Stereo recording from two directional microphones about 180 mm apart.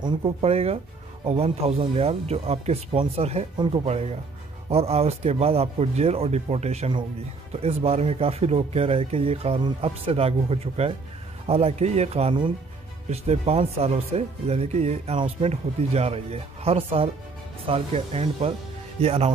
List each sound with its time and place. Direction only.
0.0 s speech: 30° right (ahead or behind)